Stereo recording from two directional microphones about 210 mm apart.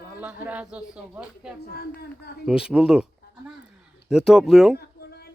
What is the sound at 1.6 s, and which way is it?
Speech, 50° left (ahead or behind).